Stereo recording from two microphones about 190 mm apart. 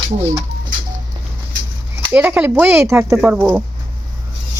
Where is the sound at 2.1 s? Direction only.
10° right (ahead or behind).